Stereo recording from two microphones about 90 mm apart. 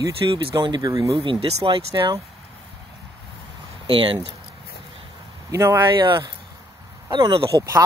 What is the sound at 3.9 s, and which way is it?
Speech, 75° right (ahead or behind).